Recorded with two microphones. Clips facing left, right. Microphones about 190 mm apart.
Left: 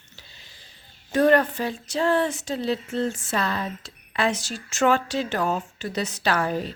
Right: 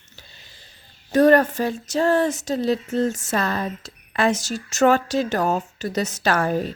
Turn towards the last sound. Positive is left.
turn(degrees=-45)  # may be behind; listen again after turning